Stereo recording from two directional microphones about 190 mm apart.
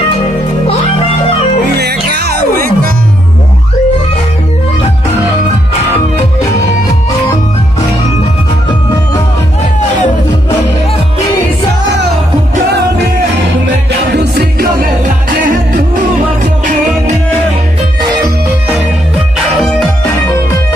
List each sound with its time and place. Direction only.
1.8 s music: 60° right (ahead or behind)
12.7 s music: 60° right (ahead or behind)
14.1 s music: 60° right (ahead or behind)